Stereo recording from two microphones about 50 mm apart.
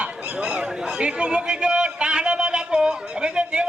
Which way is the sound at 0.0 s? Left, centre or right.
Right.